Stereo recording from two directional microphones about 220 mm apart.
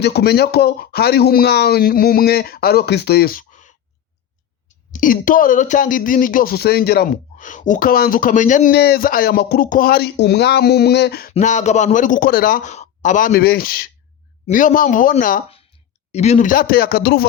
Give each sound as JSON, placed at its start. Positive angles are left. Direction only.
{"t": 0.0, "sound": "speech", "side_deg": 50}
{"t": 4.9, "sound": "speech", "side_deg": 35}
{"t": 11.3, "sound": "speech", "side_deg": 30}